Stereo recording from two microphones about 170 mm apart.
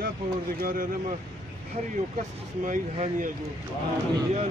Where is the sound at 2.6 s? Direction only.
50° right (ahead or behind).